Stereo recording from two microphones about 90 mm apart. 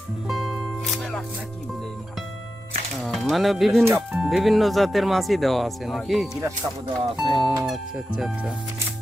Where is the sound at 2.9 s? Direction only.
Centre (ahead or behind).